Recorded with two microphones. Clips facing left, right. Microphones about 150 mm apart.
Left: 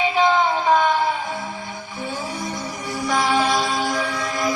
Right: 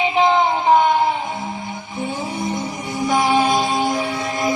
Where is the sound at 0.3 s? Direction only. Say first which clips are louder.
Right 4 dB; 25° right (ahead or behind).